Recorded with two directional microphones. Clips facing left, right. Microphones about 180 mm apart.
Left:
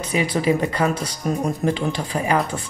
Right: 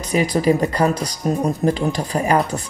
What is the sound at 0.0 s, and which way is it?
Speech, 40° right (ahead or behind).